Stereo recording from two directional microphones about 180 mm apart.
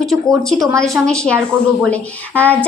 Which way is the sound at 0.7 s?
15° right (ahead or behind).